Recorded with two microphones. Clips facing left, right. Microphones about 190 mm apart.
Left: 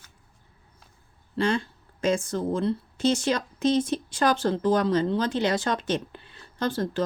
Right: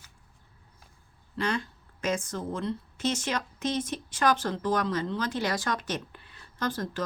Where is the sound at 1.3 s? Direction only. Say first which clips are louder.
Left 5 dB; 30° left (ahead or behind).